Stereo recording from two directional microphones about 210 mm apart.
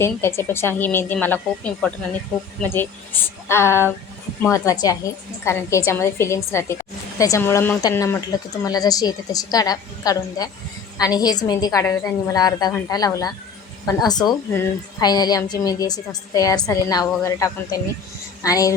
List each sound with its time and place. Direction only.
0.0 s speech: 10° left (ahead or behind)